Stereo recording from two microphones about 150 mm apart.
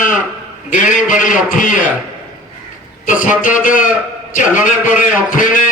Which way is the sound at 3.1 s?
60° left (ahead or behind).